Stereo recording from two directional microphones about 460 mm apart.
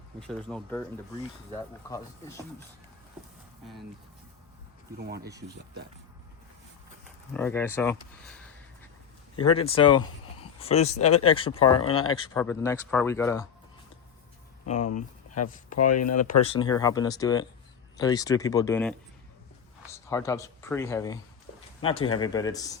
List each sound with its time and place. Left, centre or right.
0.2 s speech: centre
4.9 s speech: right
7.3 s speech: centre
9.6 s speech: centre
11.9 s speech: left
12.3 s speech: centre
14.8 s speech: left
16.4 s speech: centre